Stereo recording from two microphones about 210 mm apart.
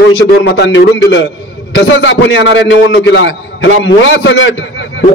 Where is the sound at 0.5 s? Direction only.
60° left (ahead or behind).